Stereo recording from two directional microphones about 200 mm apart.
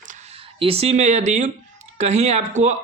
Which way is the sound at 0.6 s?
30° right (ahead or behind).